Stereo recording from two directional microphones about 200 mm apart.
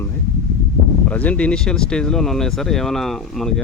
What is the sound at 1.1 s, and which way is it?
Speech, 5° left (ahead or behind).